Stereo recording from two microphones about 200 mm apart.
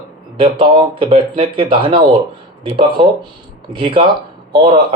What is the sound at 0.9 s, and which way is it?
Speech, 30° right (ahead or behind).